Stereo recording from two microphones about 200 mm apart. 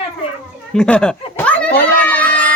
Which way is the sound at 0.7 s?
5° left (ahead or behind).